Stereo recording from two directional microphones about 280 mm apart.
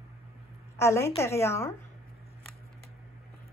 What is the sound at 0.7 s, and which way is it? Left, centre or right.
Speech, centre.